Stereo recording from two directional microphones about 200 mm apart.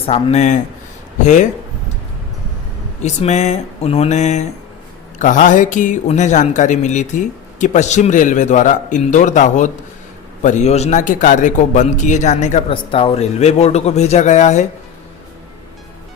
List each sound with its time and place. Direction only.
0.0 s speech: 30° left (ahead or behind)
3.0 s speech: 35° left (ahead or behind)
12.7 s speech: 25° left (ahead or behind)